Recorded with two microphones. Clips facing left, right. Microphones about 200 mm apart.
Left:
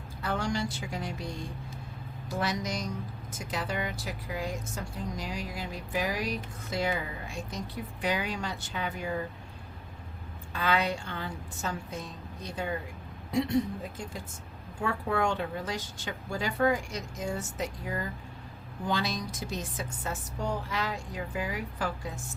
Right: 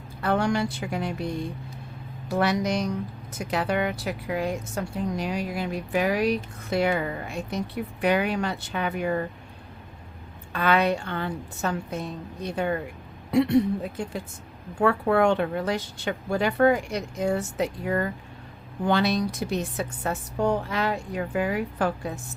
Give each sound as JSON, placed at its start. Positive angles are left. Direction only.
{"t": 0.2, "sound": "a sound", "side_deg": -60}
{"t": 2.3, "sound": "speech", "side_deg": -65}
{"t": 10.5, "sound": "speech", "side_deg": -60}